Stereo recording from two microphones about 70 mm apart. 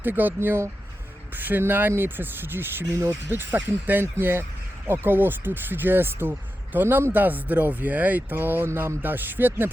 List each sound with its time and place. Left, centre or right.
0.0 s speech: right